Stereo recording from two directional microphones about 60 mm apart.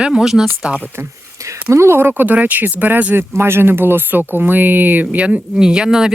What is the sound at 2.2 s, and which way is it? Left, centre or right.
Speech, right.